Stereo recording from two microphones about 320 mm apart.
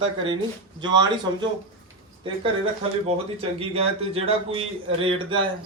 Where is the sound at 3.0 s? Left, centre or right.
Centre.